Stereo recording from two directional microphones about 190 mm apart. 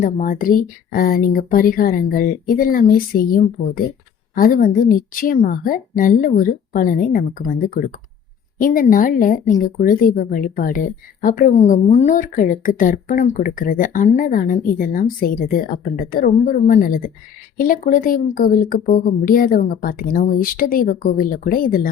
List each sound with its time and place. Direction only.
0.0 s speech: 45° left (ahead or behind)